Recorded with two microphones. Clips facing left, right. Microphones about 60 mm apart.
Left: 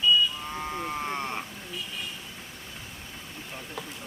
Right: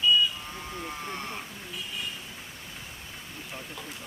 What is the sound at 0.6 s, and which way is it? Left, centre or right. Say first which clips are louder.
Vehicle: left 6 dB; left.